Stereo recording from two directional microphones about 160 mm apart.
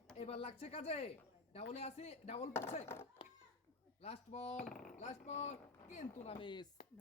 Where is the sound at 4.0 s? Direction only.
40° left (ahead or behind).